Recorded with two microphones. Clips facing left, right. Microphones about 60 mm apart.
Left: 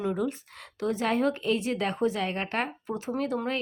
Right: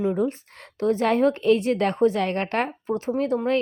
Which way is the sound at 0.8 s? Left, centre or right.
Right.